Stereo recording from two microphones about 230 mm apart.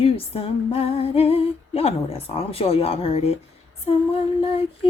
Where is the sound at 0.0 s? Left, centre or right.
Left.